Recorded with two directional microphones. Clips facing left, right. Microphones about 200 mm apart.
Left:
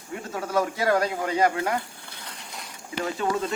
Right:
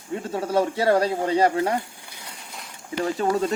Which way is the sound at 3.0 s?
35° right (ahead or behind).